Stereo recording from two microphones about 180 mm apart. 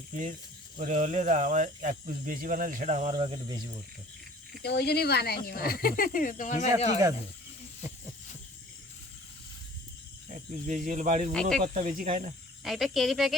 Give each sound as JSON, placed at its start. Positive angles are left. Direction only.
{"t": 0.8, "sound": "speech", "side_deg": -40}
{"t": 4.6, "sound": "speech", "side_deg": 65}
{"t": 10.3, "sound": "speech", "side_deg": -45}
{"t": 11.3, "sound": "speech", "side_deg": 5}
{"t": 11.6, "sound": "speech", "side_deg": -35}
{"t": 12.6, "sound": "speech", "side_deg": 0}